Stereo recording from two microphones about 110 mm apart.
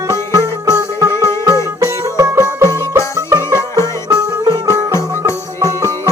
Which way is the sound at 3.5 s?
25° left (ahead or behind).